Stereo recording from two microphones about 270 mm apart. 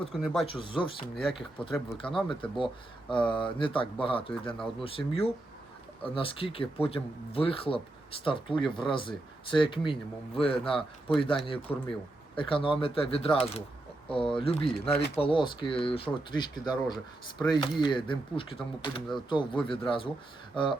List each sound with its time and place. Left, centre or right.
0.0 s speech: centre
0.4 s speech: centre